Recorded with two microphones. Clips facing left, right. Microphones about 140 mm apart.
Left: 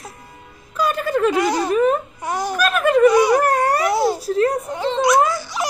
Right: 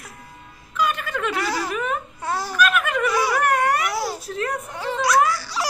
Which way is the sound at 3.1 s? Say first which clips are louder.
Left 8 dB; 20° left (ahead or behind).